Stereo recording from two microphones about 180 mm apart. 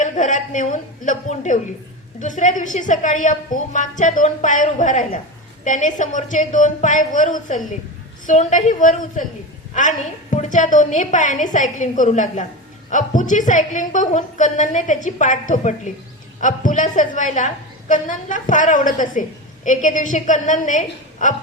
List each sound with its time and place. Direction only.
0.0 s a woman's voice: 45° left (ahead or behind)